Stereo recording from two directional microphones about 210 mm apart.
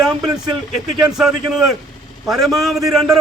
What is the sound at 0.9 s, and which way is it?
A man's voice, centre (ahead or behind).